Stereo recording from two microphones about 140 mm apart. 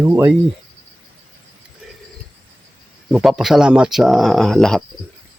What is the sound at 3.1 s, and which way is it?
Speech, 5° right (ahead or behind).